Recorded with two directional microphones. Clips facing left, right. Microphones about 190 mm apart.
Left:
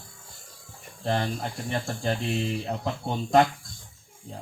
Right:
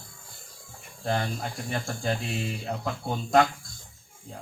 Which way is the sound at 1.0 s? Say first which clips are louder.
Left 1 dB; 35° left (ahead or behind).